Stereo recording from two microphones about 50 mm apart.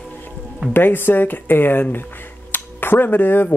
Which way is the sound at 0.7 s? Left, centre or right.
Left.